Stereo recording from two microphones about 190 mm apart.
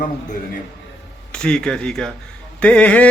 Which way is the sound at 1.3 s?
5° left (ahead or behind).